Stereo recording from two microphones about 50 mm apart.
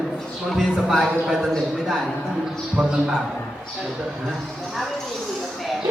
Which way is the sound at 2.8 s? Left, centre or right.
Right.